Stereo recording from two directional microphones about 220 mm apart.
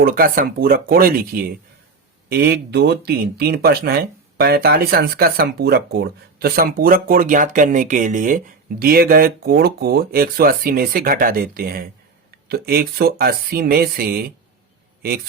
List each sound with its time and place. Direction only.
0.0 s speech: 40° right (ahead or behind)